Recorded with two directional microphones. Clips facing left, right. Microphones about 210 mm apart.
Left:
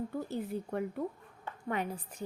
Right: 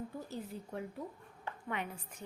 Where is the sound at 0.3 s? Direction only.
60° left (ahead or behind).